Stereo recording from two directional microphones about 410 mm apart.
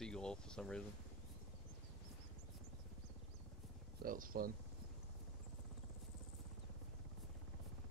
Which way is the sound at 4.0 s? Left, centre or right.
Centre.